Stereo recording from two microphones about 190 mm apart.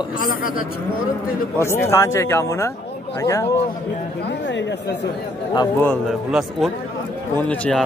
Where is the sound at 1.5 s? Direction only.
15° left (ahead or behind).